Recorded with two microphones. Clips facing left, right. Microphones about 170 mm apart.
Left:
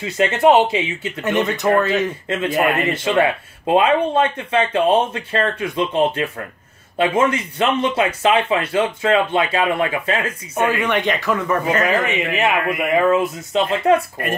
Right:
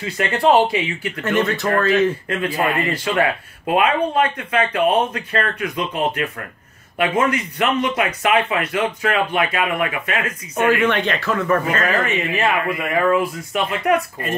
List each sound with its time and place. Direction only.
0.0 s speech: 25° left (ahead or behind)
10.7 s a man's voice: 15° left (ahead or behind)